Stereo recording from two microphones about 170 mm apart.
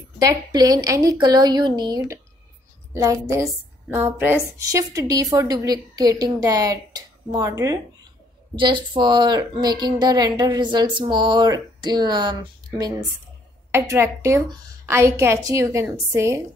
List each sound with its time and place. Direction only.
0.2 s a woman's voice: 20° right (ahead or behind)